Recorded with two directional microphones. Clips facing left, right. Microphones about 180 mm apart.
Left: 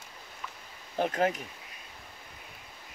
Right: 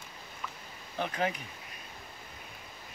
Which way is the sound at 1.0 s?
45° left (ahead or behind).